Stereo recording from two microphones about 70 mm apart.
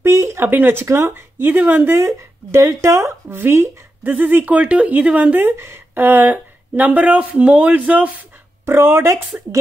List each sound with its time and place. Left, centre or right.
0.0 s speech: right
2.0 s speech: right; by 8.1 s centre
8.6 s speech: right